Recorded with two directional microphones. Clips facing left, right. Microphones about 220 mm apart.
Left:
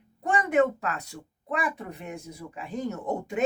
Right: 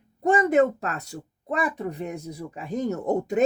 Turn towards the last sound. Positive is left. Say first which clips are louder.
# right 6 dB
turn(degrees=-40)  # may be behind; listen again after turning